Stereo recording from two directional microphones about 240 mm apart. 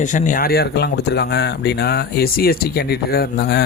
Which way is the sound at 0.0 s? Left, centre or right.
Left.